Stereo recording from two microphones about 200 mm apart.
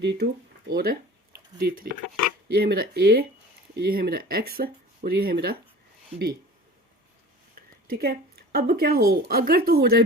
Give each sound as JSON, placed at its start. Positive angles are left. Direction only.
{"t": 0.0, "sound": "speech", "side_deg": -60}
{"t": 7.9, "sound": "speech", "side_deg": -50}